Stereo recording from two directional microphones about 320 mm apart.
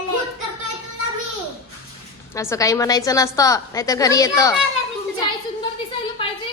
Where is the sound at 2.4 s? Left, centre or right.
Centre.